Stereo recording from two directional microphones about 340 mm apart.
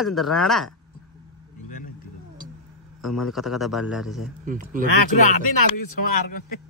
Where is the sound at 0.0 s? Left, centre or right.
Centre.